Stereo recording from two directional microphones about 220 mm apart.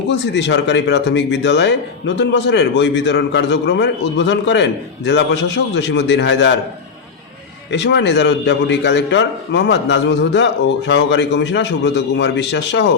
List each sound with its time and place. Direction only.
0.1 s speech: 55° left (ahead or behind)
7.7 s speech: 55° left (ahead or behind)